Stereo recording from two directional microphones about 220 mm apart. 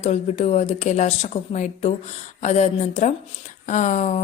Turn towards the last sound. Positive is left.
turn(degrees=35)  # may be behind; listen again after turning